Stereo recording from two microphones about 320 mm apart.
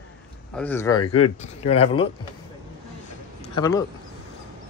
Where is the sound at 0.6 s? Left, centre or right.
Centre.